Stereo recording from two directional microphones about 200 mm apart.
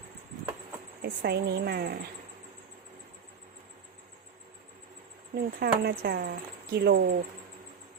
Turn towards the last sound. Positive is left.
turn(degrees=-55)  # may be behind; listen again after turning